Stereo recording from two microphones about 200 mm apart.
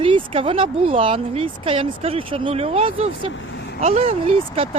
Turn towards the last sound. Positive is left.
turn(degrees=-30)  # may be behind; listen again after turning